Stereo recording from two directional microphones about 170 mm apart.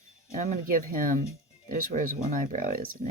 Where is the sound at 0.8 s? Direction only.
55° right (ahead or behind).